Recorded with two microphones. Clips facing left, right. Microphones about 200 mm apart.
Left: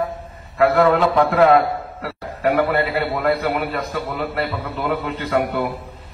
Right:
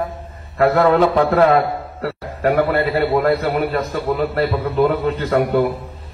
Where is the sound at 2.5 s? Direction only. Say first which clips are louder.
Right 2 dB; 45° right (ahead or behind).